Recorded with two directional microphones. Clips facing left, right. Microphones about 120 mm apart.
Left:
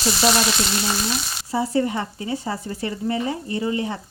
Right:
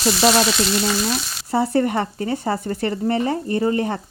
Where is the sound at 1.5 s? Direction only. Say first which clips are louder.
Right 3 dB; 60° right (ahead or behind).